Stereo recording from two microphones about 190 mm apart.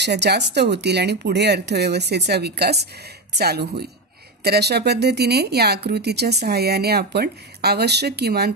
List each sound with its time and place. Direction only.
0.0 s speech: 65° right (ahead or behind)